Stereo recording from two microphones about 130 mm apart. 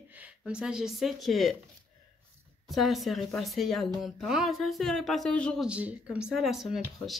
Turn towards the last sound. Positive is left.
turn(degrees=-5)  # may be behind; listen again after turning